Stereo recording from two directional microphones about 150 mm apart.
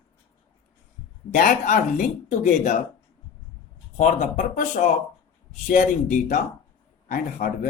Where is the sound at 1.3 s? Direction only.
55° left (ahead or behind).